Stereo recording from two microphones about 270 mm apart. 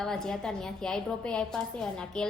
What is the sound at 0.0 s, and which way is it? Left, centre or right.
A woman's voice, centre.